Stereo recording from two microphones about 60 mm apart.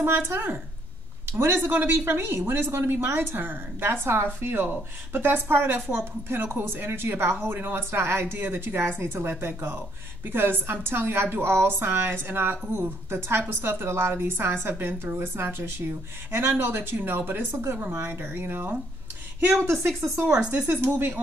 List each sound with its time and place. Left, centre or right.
0.3 s a woman's voice: right
20.5 s a woman's voice: right